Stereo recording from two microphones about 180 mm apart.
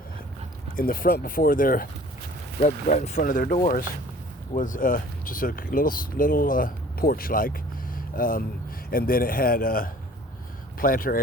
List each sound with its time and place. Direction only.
0.8 s speech: 50° left (ahead or behind)